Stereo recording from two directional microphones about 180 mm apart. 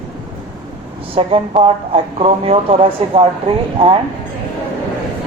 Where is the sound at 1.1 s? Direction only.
30° right (ahead or behind).